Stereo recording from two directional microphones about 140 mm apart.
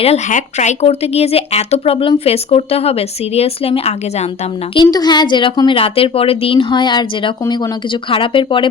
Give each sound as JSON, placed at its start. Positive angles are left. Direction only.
{"t": 0.3, "sound": "speech", "side_deg": 60}
{"t": 4.7, "sound": "a woman's voice", "side_deg": 30}
{"t": 8.1, "sound": "a woman's voice", "side_deg": 40}